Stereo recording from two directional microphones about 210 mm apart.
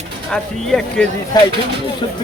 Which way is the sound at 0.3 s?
5° left (ahead or behind).